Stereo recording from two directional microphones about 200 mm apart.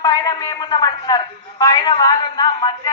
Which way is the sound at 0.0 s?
20° left (ahead or behind).